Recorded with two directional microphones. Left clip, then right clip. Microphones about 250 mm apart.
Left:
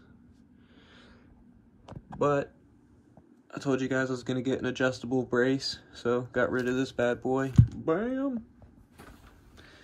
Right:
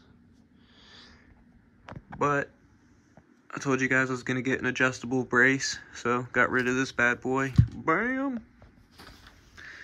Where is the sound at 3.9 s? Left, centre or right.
Centre.